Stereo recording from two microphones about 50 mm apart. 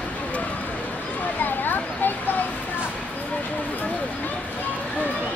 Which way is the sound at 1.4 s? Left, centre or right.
Left.